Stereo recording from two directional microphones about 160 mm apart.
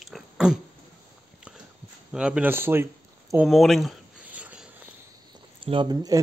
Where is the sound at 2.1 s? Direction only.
5° right (ahead or behind).